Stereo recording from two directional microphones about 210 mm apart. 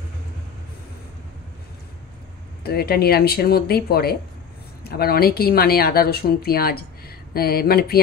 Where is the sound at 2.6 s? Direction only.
50° left (ahead or behind).